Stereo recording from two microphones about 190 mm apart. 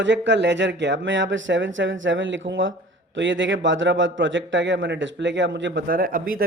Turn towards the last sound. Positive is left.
turn(degrees=-45)  # may be behind; listen again after turning